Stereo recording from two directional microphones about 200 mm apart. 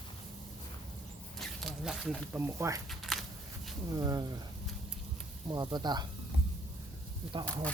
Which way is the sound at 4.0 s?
20° right (ahead or behind).